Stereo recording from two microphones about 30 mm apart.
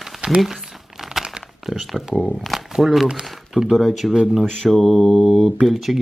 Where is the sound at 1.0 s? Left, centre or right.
Centre.